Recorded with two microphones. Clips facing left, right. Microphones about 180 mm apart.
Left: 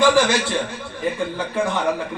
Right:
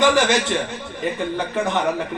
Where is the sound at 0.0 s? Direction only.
20° right (ahead or behind).